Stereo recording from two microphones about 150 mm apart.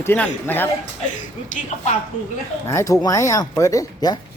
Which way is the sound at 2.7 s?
20° left (ahead or behind).